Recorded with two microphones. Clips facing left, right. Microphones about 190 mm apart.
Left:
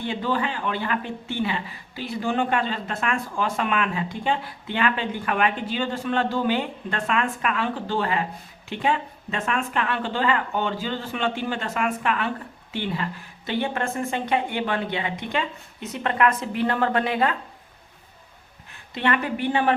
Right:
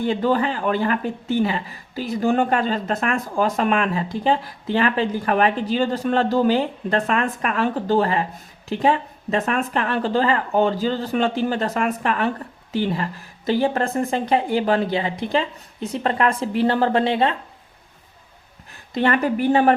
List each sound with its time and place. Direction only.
0.0 s speech: 45° right (ahead or behind); by 17.3 s 25° right (ahead or behind)
18.9 s speech: 40° right (ahead or behind)